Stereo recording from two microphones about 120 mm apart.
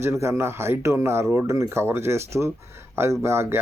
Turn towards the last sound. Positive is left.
turn(degrees=-20)  # may be behind; listen again after turning